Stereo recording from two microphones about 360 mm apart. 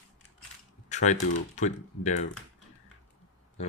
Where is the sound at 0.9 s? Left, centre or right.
Centre.